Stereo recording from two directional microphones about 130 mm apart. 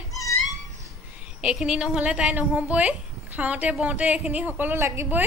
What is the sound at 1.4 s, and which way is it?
A woman's voice, 5° right (ahead or behind).